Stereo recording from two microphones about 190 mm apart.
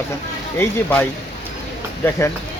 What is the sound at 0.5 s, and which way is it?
Speech, 10° left (ahead or behind).